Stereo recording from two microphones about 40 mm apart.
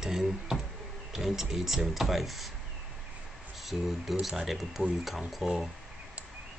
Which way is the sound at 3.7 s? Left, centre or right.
Centre.